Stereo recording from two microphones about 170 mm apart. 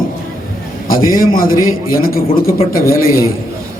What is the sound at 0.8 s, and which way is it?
A man's voice, 55° left (ahead or behind).